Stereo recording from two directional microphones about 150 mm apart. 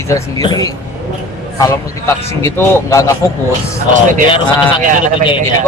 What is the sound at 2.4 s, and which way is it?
Speech, 20° left (ahead or behind).